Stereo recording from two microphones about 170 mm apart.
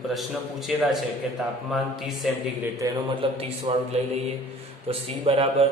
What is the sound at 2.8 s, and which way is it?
Speech, 20° right (ahead or behind).